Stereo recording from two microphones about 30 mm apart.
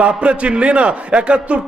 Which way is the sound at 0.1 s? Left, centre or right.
Right.